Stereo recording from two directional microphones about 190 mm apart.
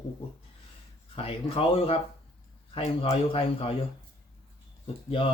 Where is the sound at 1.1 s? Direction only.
30° left (ahead or behind).